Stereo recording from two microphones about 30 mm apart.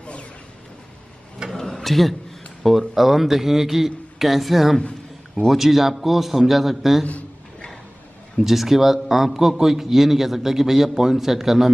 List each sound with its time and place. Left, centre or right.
0.0 s a sound: left
1.8 s a man's voice: centre
2.9 s a man's voice: centre
8.4 s a man's voice: centre